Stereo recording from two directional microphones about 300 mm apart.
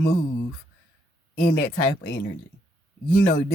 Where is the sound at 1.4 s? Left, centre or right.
Left.